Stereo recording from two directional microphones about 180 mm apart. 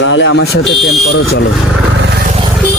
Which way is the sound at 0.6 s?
Centre (ahead or behind).